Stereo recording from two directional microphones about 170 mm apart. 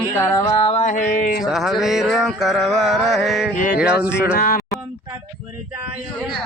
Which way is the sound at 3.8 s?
5° right (ahead or behind).